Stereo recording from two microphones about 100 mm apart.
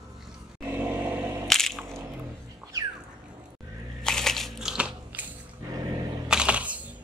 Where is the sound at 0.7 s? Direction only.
20° right (ahead or behind).